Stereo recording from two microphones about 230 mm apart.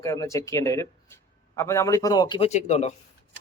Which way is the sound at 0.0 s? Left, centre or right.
Centre.